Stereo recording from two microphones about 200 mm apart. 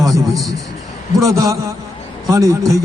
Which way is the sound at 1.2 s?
15° right (ahead or behind).